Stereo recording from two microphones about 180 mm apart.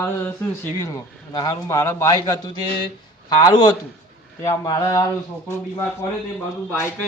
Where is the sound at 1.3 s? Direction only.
20° left (ahead or behind).